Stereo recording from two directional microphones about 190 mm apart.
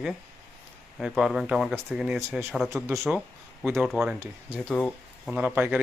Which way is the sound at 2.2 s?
15° right (ahead or behind).